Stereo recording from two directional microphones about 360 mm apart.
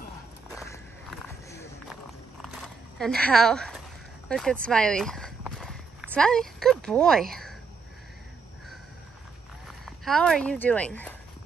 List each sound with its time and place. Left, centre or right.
0.6 s a sound: centre
3.0 s speech: centre
9.7 s speech: centre